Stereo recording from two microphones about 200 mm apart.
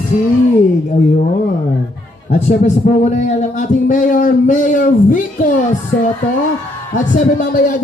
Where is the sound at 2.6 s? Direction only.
35° left (ahead or behind).